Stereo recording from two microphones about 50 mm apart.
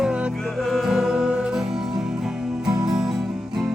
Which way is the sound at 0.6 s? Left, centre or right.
Centre.